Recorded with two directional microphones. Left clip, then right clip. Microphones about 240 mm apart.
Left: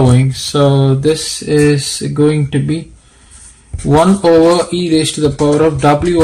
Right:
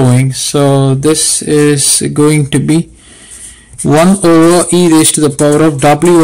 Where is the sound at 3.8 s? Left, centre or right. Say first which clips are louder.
Right 2 dB; right.